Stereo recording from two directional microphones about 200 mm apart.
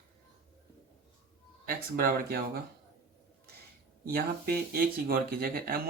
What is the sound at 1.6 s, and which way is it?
Speech, 45° right (ahead or behind).